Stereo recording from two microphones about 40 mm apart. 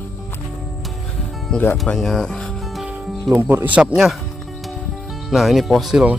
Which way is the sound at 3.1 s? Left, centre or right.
Centre.